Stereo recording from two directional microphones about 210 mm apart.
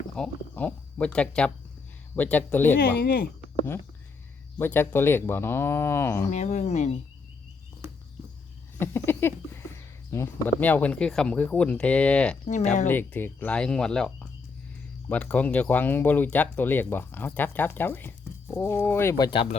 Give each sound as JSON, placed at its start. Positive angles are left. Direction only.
{"t": 0.2, "sound": "speech", "side_deg": 5}
{"t": 3.0, "sound": "speech", "side_deg": 50}
{"t": 4.5, "sound": "speech", "side_deg": 10}
{"t": 6.3, "sound": "speech", "side_deg": 35}
{"t": 8.8, "sound": "speech", "side_deg": 10}
{"t": 12.5, "sound": "speech", "side_deg": 35}
{"t": 12.9, "sound": "speech", "side_deg": 10}